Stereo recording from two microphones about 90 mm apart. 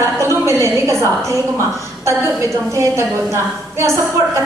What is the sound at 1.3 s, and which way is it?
A woman's voice, 35° right (ahead or behind).